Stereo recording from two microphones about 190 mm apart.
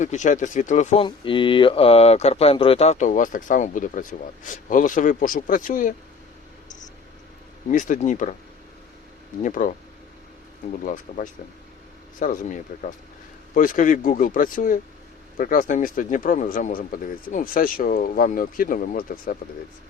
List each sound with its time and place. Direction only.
0.0 s speech: 40° left (ahead or behind)
1.0 s speech: 25° left (ahead or behind); by 5.9 s 45° left (ahead or behind)
7.7 s speech: 40° left (ahead or behind)
9.4 s speech: 45° left (ahead or behind)
10.8 s speech: 45° left (ahead or behind)